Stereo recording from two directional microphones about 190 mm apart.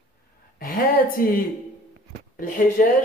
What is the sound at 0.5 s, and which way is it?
A man's voice, 50° left (ahead or behind).